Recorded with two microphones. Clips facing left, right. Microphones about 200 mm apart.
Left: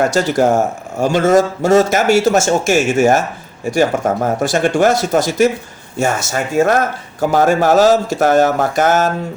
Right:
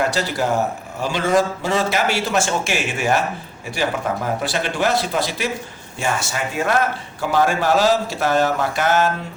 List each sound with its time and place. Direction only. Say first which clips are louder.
0.0 s a man's voice: left 7 dB; 45° left (ahead or behind)